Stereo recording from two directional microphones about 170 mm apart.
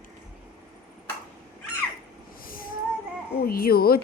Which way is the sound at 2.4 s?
55° left (ahead or behind).